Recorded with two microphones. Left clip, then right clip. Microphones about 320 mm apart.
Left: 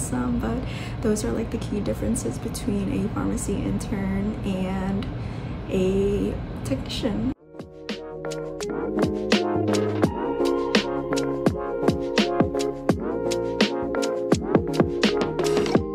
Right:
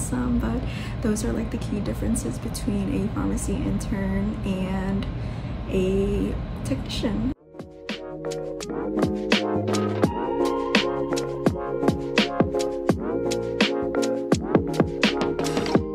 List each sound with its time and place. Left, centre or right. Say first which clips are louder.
1.0 s a woman's voice: left 2 dB; centre
8.3 s music: even; centre